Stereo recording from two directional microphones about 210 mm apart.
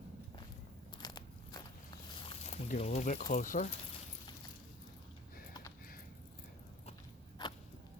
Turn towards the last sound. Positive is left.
turn(degrees=20)  # may be behind; listen again after turning